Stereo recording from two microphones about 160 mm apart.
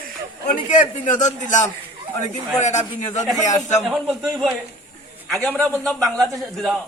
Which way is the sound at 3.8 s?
Centre (ahead or behind).